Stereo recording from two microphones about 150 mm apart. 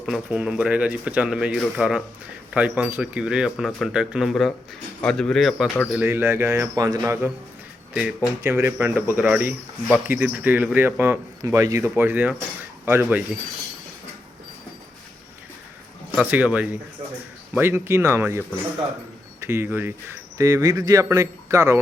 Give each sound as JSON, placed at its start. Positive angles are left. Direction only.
{"t": 0.0, "sound": "speech", "side_deg": -5}
{"t": 5.9, "sound": "speech", "side_deg": -15}
{"t": 7.9, "sound": "speech", "side_deg": -5}
{"t": 8.4, "sound": "speech", "side_deg": -15}
{"t": 16.1, "sound": "speech", "side_deg": -10}